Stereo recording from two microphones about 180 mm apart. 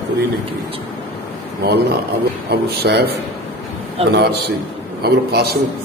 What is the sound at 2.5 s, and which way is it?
A man's voice, 65° right (ahead or behind).